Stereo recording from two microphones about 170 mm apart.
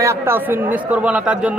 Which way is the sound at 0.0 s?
15° right (ahead or behind).